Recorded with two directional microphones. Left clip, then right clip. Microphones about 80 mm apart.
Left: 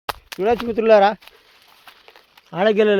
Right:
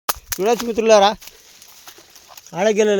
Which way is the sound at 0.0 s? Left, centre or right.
Right.